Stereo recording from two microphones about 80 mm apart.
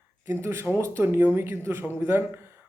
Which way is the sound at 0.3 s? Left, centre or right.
Right.